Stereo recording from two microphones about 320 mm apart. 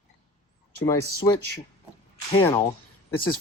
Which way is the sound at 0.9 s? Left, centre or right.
Centre.